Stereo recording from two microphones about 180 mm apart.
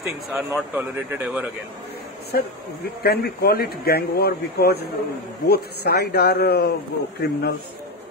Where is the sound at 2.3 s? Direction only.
55° left (ahead or behind).